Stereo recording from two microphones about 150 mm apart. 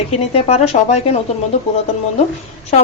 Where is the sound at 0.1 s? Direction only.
45° left (ahead or behind).